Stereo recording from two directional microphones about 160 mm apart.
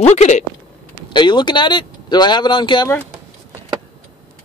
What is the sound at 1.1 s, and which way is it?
Speech, 30° left (ahead or behind).